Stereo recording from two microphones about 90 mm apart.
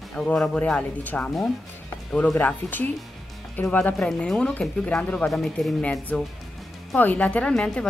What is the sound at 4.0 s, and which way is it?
A woman's voice, 5° left (ahead or behind).